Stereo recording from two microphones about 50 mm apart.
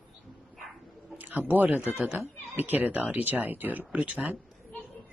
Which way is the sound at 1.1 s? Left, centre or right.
Right.